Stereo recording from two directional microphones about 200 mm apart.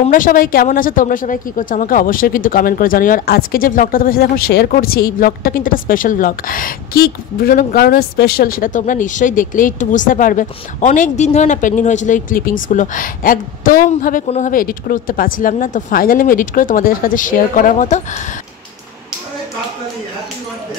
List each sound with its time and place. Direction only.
0.0 s a woman's voice: 45° left (ahead or behind)